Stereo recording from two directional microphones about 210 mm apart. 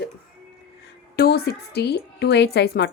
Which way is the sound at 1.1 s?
50° left (ahead or behind).